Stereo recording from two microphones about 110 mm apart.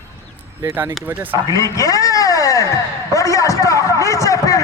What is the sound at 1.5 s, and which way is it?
Speech, 30° left (ahead or behind).